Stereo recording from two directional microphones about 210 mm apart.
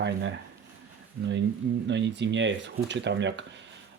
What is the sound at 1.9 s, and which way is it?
Speech, 55° right (ahead or behind).